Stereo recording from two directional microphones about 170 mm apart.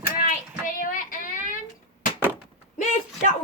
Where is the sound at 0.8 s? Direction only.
50° left (ahead or behind).